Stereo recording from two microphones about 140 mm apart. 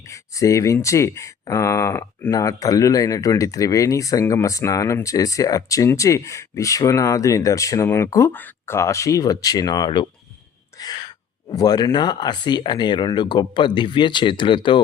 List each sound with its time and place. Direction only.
0.1 s speech: 25° left (ahead or behind)